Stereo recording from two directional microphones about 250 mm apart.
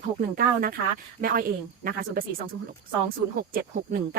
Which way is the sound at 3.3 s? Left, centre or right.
Right.